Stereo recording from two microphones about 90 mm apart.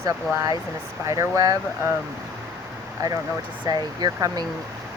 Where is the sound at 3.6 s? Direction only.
50° right (ahead or behind).